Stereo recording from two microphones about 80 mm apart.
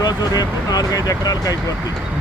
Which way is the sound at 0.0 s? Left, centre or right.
Left.